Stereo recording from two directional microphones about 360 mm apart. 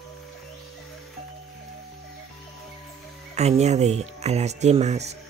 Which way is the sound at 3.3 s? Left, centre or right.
Centre.